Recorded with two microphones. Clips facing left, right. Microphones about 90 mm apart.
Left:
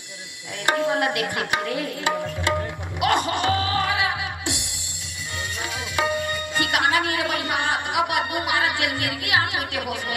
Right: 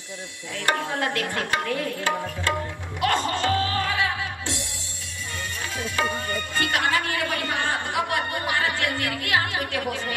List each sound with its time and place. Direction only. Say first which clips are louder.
0.7 s tabla: left 4 dB; 15° left (ahead or behind)
3.0 s music: left 2 dB; 15° left (ahead or behind)
5.9 s speech: left 3 dB; 15° left (ahead or behind)
9.2 s tabla: left 2 dB; 15° left (ahead or behind)